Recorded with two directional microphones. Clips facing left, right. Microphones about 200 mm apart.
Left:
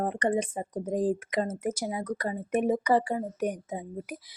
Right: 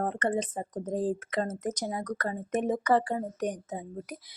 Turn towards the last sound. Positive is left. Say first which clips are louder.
# left 2 dB
turn(degrees=10)  # may be behind; listen again after turning